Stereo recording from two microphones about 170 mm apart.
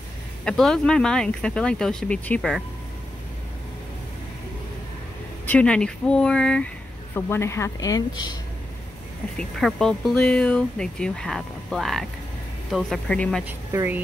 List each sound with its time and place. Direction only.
0.5 s speech: 5° left (ahead or behind)
5.5 s speech: 5° left (ahead or behind); by 8.4 s 20° left (ahead or behind)
9.4 s speech: centre (ahead or behind)
13.5 s speech: 15° right (ahead or behind)